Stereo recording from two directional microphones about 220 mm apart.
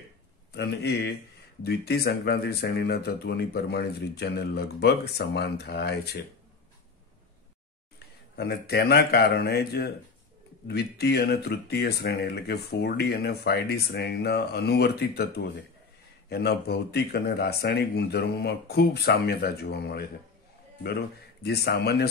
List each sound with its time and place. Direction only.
0.5 s speech: 50° left (ahead or behind)
8.4 s speech: 45° left (ahead or behind)